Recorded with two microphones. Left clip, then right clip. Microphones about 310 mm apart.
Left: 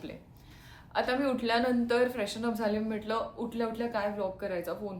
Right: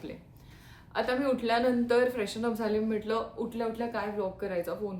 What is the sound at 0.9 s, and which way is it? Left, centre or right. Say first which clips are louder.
Speech: right 1 dB; centre.